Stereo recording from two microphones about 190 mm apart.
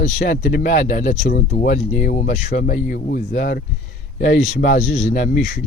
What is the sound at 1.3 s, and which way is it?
Speech, 50° left (ahead or behind).